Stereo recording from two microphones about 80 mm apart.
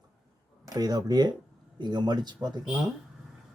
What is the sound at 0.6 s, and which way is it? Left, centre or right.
Speech, right.